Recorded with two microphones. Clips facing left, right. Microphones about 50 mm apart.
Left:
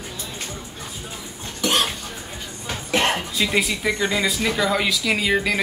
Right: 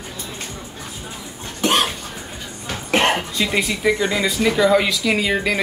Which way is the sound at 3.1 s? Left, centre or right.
Centre.